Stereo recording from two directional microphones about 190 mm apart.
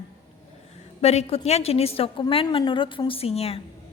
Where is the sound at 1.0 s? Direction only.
35° left (ahead or behind).